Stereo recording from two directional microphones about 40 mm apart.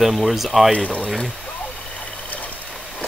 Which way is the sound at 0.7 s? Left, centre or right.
Left.